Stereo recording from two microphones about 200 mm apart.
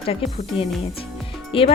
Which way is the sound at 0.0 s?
30° left (ahead or behind).